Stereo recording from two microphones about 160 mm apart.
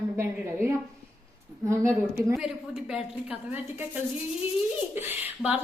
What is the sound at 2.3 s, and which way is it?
Speech, 5° right (ahead or behind).